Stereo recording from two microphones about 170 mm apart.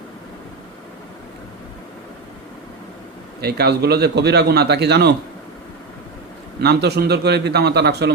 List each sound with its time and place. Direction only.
3.4 s a man's voice: 70° right (ahead or behind)
6.6 s a man's voice: 75° right (ahead or behind)